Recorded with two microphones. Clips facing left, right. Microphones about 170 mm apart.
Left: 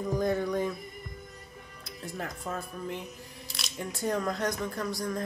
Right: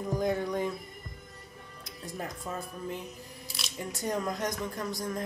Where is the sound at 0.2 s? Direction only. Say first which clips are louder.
Left 1 dB; 15° right (ahead or behind).